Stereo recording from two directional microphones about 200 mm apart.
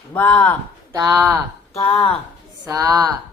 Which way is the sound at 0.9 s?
15° right (ahead or behind).